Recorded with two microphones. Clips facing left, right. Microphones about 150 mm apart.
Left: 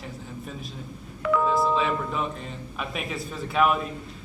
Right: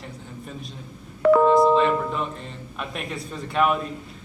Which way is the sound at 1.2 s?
45° right (ahead or behind).